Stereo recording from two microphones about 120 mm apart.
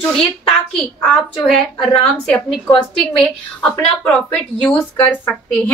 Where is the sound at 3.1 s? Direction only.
10° left (ahead or behind).